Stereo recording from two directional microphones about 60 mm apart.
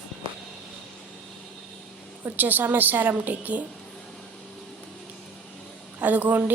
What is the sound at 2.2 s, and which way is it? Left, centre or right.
A woman's voice, right.